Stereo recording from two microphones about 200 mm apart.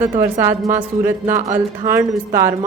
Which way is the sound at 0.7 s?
15° right (ahead or behind).